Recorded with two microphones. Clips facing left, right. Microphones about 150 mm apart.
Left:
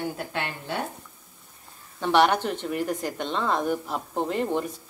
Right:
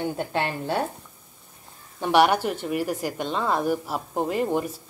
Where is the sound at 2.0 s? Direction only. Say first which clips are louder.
Right 1 dB; 10° right (ahead or behind).